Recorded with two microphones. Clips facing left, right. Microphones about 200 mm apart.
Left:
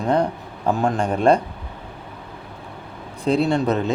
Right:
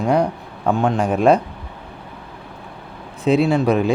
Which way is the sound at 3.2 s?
5° right (ahead or behind).